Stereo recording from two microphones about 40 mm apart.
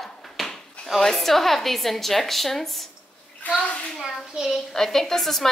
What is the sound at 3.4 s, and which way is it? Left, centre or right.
Speech, left.